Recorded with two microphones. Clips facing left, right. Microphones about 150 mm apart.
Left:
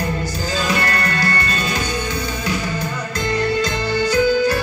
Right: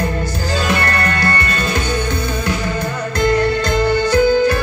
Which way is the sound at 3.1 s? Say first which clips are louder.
Right 4 dB; 55° right (ahead or behind).